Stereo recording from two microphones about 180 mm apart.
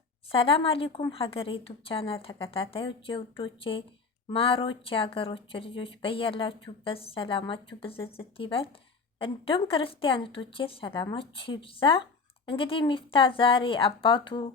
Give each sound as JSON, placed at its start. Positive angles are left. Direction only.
{"t": 0.3, "sound": "a woman's voice", "side_deg": 30}